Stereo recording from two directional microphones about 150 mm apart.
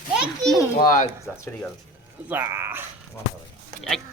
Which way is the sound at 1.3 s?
10° left (ahead or behind).